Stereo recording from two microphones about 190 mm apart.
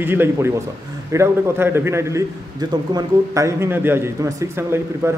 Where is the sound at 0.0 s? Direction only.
10° right (ahead or behind).